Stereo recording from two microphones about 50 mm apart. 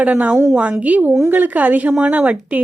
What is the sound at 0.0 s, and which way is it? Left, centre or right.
A woman's voice, right.